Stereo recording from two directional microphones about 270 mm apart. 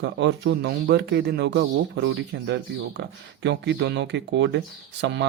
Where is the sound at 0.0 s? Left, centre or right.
Right.